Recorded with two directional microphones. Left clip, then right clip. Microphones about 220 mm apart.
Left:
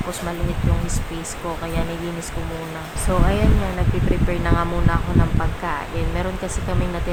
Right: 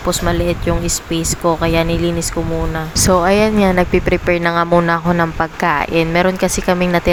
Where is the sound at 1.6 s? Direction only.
35° right (ahead or behind).